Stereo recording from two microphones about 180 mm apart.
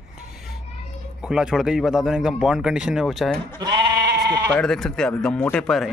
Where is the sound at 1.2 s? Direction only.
5° right (ahead or behind).